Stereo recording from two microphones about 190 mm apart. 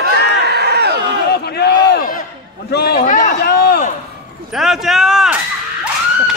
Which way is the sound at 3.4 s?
55° left (ahead or behind).